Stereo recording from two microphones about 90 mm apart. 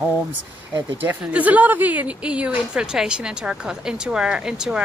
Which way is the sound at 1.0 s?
15° right (ahead or behind).